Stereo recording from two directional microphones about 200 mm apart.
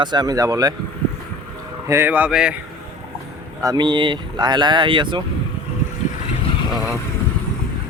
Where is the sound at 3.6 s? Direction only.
20° right (ahead or behind).